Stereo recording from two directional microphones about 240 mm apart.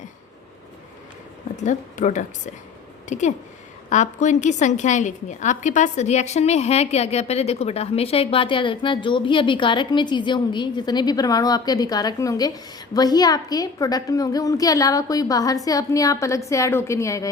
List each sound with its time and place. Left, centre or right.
1.5 s a woman's voice: left; by 17.2 s centre